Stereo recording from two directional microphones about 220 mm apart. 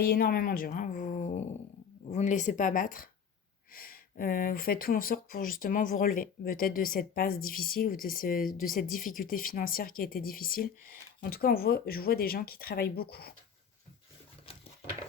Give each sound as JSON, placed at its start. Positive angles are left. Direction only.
{"t": 0.1, "sound": "speech", "side_deg": 45}